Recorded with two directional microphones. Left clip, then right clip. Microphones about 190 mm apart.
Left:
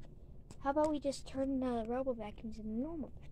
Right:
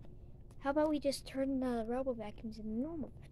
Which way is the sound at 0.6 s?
10° right (ahead or behind).